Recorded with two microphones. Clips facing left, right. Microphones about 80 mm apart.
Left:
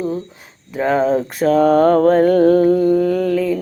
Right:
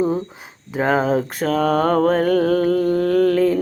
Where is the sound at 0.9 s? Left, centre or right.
Centre.